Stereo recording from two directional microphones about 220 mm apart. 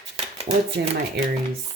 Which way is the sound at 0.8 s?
50° right (ahead or behind).